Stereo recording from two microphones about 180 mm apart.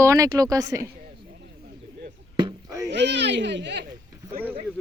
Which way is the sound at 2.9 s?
80° right.